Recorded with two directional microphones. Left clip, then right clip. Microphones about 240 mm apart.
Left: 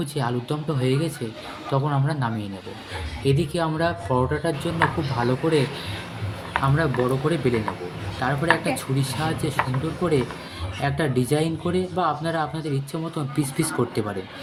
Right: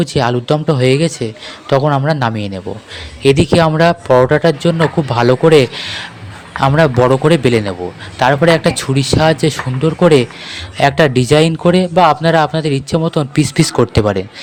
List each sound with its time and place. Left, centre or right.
0.0 s a man's voice: right
6.6 s a man's voice: right